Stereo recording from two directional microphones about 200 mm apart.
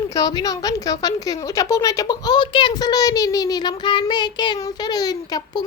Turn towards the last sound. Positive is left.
turn(degrees=20)  # may be behind; listen again after turning